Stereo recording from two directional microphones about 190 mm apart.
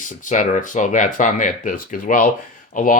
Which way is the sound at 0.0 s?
40° left (ahead or behind).